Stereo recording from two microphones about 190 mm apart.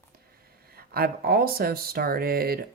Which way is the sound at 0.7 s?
55° right (ahead or behind).